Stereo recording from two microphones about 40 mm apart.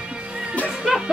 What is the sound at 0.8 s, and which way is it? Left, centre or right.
Music, centre.